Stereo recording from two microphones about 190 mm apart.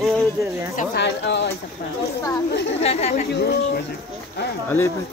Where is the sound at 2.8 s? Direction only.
35° left (ahead or behind).